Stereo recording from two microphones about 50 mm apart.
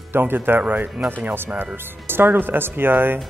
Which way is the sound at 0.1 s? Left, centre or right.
Right.